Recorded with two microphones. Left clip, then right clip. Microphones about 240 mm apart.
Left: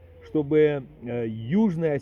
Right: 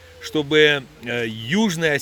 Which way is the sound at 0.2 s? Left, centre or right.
Centre.